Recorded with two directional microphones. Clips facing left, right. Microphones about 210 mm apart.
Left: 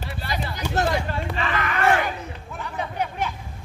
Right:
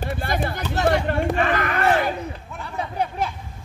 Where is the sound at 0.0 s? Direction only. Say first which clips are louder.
Right 5 dB; 50° right (ahead or behind); by 3.3 s 30° right (ahead or behind).